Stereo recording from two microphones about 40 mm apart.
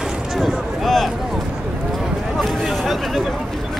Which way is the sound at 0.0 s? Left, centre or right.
Centre.